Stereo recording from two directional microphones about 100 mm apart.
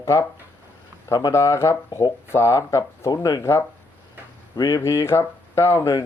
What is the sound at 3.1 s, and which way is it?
Speech, 40° left (ahead or behind).